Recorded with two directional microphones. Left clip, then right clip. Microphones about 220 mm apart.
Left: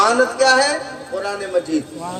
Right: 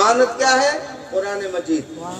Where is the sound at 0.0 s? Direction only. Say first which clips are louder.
Left 1 dB; 35° left (ahead or behind).